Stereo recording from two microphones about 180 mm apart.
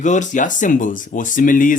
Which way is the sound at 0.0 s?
45° left (ahead or behind).